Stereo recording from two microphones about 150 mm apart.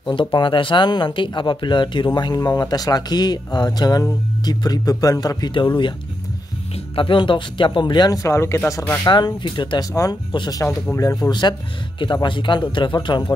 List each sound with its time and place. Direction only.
0.0 s speech: 30° left (ahead or behind)
7.0 s speech: 35° left (ahead or behind)